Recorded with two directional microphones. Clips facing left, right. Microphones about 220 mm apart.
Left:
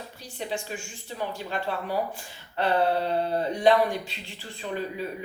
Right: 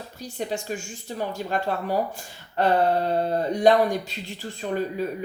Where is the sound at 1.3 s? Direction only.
40° right (ahead or behind).